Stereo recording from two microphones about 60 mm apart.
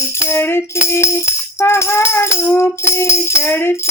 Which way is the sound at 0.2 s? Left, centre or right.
Left.